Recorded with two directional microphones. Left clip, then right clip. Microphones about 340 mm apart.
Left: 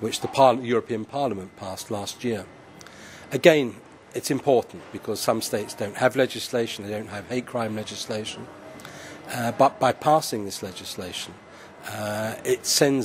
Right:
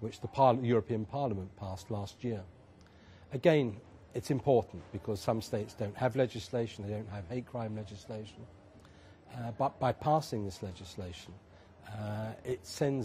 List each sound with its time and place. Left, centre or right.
0.0 s speech: right